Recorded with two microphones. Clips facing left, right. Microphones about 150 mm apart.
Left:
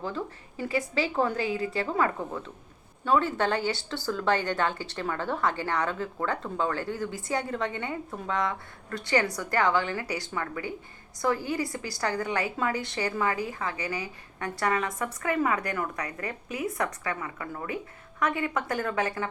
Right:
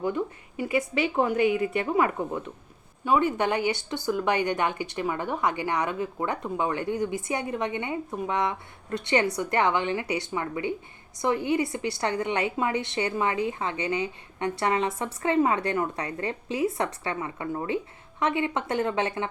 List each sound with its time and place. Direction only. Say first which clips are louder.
0.6 s a woman's voice: right 2 dB; 20° right (ahead or behind)